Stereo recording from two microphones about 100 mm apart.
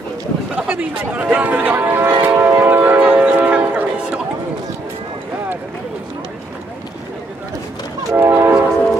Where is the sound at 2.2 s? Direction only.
20° right (ahead or behind).